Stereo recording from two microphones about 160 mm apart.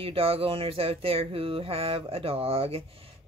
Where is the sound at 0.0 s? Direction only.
35° right (ahead or behind).